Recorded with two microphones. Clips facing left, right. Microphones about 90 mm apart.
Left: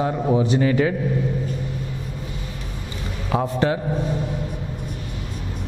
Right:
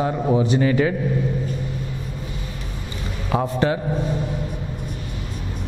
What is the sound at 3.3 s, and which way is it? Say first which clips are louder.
Speech: even; 15° right (ahead or behind).